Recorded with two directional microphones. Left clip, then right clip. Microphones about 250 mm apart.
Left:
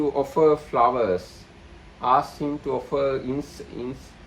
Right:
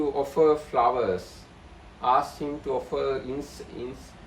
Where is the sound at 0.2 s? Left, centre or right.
Left.